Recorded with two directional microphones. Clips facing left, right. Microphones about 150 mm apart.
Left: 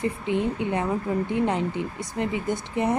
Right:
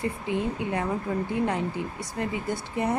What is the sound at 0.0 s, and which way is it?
Speech, 20° left (ahead or behind).